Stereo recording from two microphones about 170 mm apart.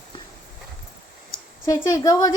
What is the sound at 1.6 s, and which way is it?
Speech, 20° left (ahead or behind).